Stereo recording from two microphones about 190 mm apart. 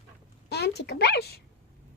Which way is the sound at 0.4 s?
60° left (ahead or behind).